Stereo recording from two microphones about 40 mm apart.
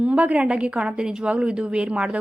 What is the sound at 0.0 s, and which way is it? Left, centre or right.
A woman's voice, right.